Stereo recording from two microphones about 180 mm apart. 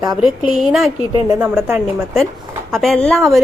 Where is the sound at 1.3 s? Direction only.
10° right (ahead or behind).